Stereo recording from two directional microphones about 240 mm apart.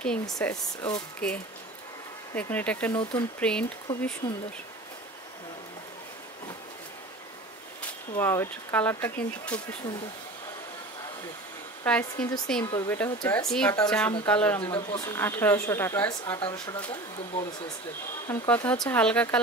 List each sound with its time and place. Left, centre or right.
0.0 s speech: centre
3.0 s speech: left
3.3 s speech: centre
8.2 s speech: centre
11.8 s speech: centre
12.6 s speech: centre
12.9 s speech: centre
14.6 s speech: left
18.2 s speech: centre